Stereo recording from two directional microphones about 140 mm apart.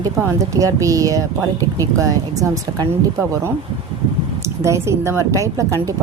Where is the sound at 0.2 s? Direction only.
20° right (ahead or behind).